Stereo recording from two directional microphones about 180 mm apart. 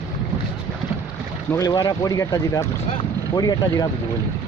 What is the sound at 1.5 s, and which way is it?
Speech, 20° left (ahead or behind).